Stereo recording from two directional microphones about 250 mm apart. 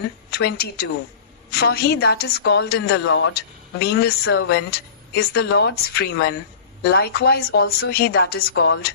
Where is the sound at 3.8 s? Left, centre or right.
Left.